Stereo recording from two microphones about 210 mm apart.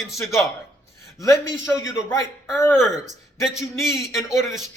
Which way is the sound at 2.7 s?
5° right (ahead or behind).